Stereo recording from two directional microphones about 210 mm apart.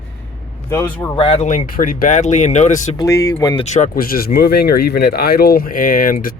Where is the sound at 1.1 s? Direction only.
25° left (ahead or behind).